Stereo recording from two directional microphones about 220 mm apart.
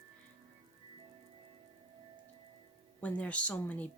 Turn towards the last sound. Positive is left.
turn(degrees=5)  # may be behind; listen again after turning